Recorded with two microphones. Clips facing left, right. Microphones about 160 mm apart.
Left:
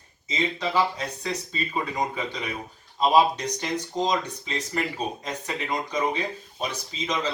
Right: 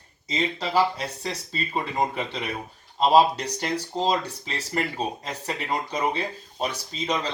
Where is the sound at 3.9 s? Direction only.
30° right (ahead or behind).